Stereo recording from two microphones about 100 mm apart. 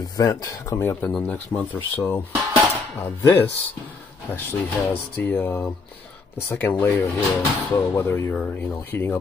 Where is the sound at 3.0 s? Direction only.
20° left (ahead or behind).